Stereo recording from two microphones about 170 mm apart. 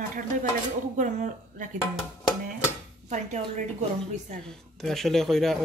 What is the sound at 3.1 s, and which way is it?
Speech, 45° right (ahead or behind).